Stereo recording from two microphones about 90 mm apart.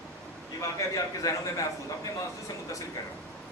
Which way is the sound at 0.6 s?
40° left (ahead or behind).